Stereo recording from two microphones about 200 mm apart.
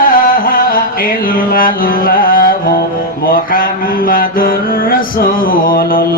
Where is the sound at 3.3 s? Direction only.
45° left (ahead or behind).